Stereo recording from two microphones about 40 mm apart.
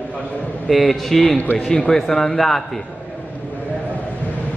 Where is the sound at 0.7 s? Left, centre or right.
Centre.